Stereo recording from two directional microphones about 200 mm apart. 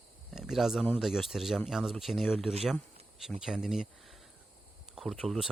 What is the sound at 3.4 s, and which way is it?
Speech, centre (ahead or behind).